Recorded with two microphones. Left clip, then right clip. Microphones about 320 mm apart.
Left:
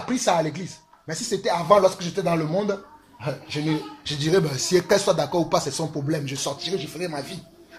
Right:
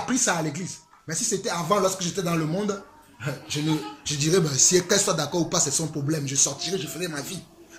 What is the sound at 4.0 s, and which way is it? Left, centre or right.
Speech, centre.